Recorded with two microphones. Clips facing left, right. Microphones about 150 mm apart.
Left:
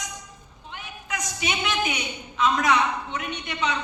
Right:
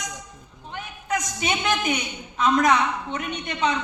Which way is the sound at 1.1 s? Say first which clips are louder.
Right 4 dB; 45° right (ahead or behind).